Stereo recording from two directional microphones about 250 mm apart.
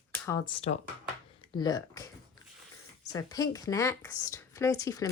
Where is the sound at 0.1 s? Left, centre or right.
Centre.